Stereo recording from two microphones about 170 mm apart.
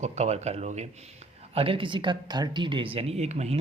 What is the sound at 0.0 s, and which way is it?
Speech, 40° right (ahead or behind).